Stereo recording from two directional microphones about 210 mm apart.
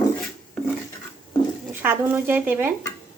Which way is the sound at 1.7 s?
10° right (ahead or behind).